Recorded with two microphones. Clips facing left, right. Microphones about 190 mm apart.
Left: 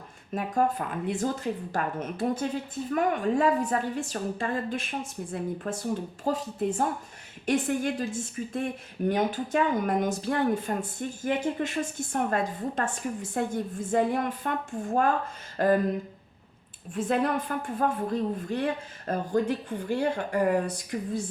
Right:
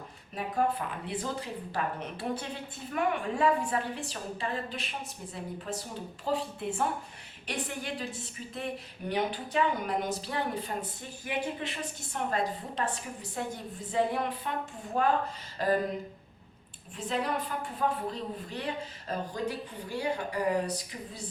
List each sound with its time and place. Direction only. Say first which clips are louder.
0.3 s a woman's voice: left 3 dB; 50° left (ahead or behind)
16.9 s a woman's voice: left 6 dB; 50° left (ahead or behind)